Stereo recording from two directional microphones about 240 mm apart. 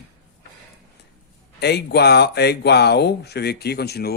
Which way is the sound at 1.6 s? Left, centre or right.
Left.